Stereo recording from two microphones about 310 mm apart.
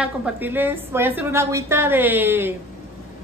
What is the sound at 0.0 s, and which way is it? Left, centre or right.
A woman's voice, centre.